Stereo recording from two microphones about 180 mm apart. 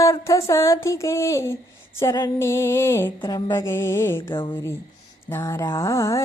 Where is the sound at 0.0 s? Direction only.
15° left (ahead or behind).